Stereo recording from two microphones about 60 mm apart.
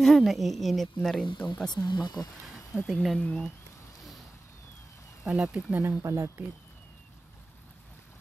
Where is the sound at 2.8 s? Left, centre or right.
Centre.